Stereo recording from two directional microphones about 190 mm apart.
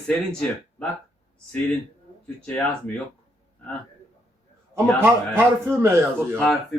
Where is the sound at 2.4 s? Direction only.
5° left (ahead or behind).